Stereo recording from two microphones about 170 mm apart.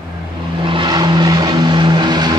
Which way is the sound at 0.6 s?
30° right (ahead or behind).